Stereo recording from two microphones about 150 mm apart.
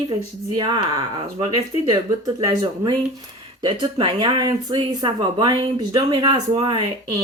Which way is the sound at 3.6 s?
35° right (ahead or behind).